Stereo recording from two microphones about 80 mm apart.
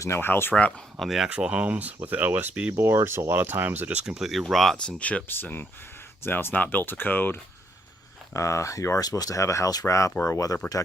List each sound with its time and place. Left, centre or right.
0.0 s speech: left
0.9 s speech: centre
1.3 s speech: centre
2.7 s speech: right
4.0 s speech: centre
4.9 s speech: centre
8.3 s speech: left